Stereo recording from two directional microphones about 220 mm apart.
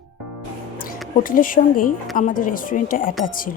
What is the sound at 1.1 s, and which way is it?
Speech, 40° left (ahead or behind).